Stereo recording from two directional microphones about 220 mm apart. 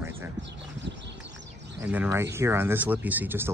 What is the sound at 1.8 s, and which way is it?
Speech, 10° right (ahead or behind).